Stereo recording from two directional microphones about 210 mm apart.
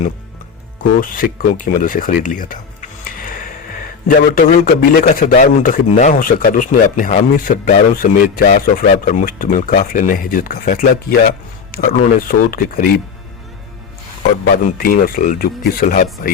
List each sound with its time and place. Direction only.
0.8 s speech: 40° left (ahead or behind)
14.6 s speech: 45° left (ahead or behind)